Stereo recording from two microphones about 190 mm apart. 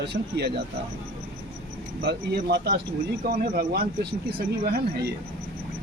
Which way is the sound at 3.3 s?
50° right (ahead or behind).